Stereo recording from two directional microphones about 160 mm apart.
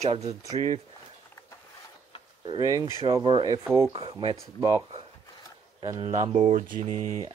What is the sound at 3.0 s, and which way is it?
Speech, 30° right (ahead or behind).